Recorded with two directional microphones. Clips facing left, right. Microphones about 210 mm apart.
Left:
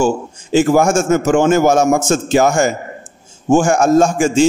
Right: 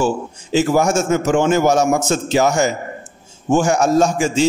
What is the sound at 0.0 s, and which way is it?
A man's voice, 50° left (ahead or behind).